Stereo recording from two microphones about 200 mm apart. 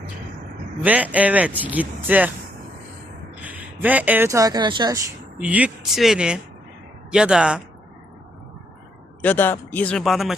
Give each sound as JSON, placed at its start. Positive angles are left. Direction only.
{"t": 0.9, "sound": "speech", "side_deg": -5}
{"t": 3.4, "sound": "speech", "side_deg": -10}
{"t": 5.4, "sound": "speech", "side_deg": -5}
{"t": 9.2, "sound": "speech", "side_deg": 10}